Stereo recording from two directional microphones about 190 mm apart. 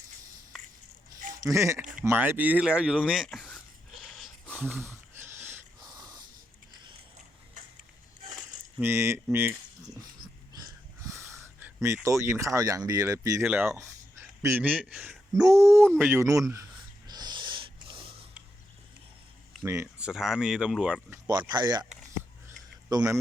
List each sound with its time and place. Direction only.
1.4 s speech: 15° right (ahead or behind); by 3.6 s 5° left (ahead or behind)
4.1 s a sound: 5° left (ahead or behind)
4.5 s wheeze: 10° right (ahead or behind)
5.9 s snort: 20° right (ahead or behind)
8.8 s speech: 15° right (ahead or behind)
10.6 s a sound: 15° right (ahead or behind)
12.0 s speech: 15° right (ahead or behind)
17.1 s snort: 20° right (ahead or behind)
19.6 s speech: 15° right (ahead or behind)
21.2 s speech: 20° right (ahead or behind)
22.4 s a sound: 15° right (ahead or behind)